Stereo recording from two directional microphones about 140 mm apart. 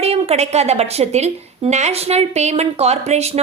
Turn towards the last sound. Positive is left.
turn(degrees=-50)  # may be behind; listen again after turning